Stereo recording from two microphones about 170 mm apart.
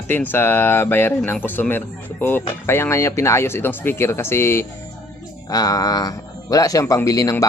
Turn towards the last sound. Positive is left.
turn(degrees=20)  # may be behind; listen again after turning